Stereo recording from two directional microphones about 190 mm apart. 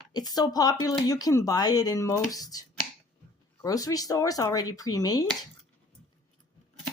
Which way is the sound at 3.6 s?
20° left (ahead or behind).